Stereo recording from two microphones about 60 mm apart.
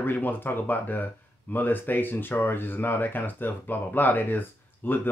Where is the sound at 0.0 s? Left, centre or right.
Left.